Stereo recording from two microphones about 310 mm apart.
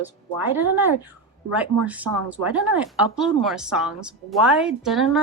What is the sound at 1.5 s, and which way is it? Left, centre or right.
A woman's voice, centre.